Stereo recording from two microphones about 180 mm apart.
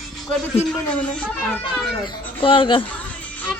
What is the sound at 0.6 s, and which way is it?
Speech, 5° left (ahead or behind).